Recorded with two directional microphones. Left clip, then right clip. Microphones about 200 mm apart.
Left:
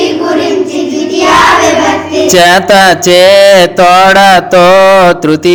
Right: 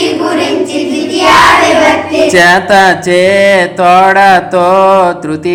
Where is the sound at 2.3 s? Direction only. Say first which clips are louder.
Left 2 dB; 40° left (ahead or behind).